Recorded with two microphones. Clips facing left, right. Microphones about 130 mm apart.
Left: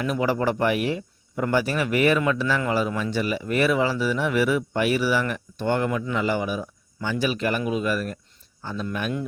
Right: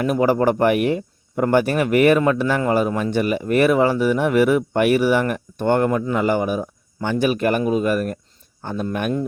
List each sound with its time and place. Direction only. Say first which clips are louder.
0.0 s speech: right 6 dB; 45° right (ahead or behind)